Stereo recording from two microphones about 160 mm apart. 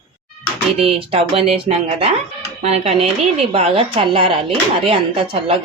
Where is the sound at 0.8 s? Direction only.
35° right (ahead or behind).